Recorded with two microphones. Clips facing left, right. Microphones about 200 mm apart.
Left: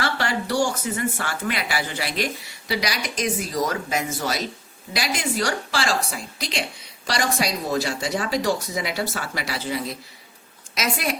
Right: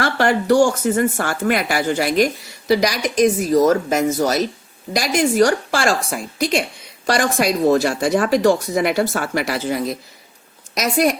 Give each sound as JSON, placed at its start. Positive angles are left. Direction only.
{"t": 0.0, "sound": "speech", "side_deg": -50}